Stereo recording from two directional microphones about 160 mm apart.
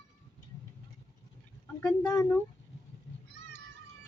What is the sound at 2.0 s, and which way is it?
Speech, 20° left (ahead or behind).